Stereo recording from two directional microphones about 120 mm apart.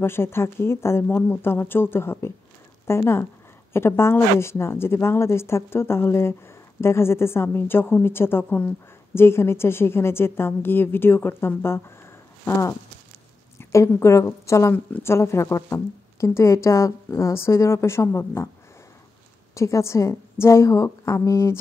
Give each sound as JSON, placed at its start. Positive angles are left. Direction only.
{"t": 0.0, "sound": "a woman's voice", "side_deg": 20}
{"t": 19.5, "sound": "speech", "side_deg": 25}